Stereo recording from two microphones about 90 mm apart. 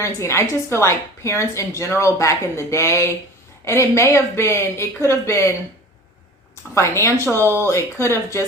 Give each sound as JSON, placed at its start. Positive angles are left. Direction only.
{"t": 0.0, "sound": "a woman's voice", "side_deg": 30}
{"t": 6.7, "sound": "a woman's voice", "side_deg": 30}